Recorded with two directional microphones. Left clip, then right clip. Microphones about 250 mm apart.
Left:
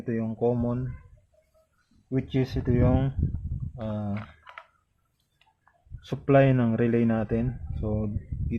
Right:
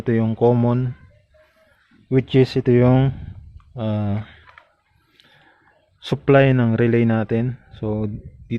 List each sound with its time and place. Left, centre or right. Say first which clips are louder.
0.0 s speech: right 9 dB; right
2.0 s speech: right 12 dB; right
6.1 s speech: right 6 dB; right